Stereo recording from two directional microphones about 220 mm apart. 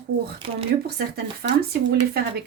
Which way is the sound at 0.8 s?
45° right (ahead or behind).